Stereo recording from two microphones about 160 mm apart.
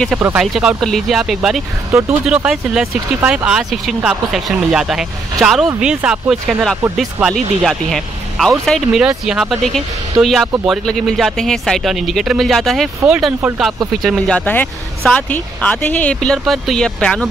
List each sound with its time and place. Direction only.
0.2 s speech: 5° right (ahead or behind)
1.9 s speech: 20° right (ahead or behind)
2.2 s speech: 5° right (ahead or behind)